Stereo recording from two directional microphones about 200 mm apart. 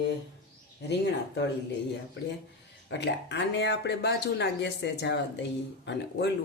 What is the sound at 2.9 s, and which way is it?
Speech, 60° left (ahead or behind).